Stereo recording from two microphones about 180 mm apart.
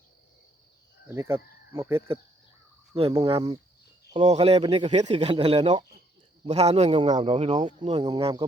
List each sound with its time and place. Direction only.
1.0 s cricket: 15° right (ahead or behind)
3.1 s speech: 25° right (ahead or behind)